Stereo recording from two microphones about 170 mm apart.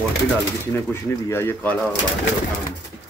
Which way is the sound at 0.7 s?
15° left (ahead or behind).